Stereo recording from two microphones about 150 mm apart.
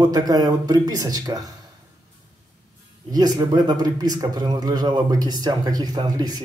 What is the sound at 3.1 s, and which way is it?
Speech, 25° right (ahead or behind).